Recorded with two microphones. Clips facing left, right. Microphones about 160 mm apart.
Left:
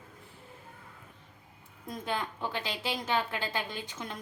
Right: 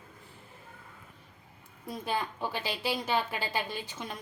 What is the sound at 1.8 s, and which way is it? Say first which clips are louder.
A woman's voice: right 1 dB; 10° right (ahead or behind).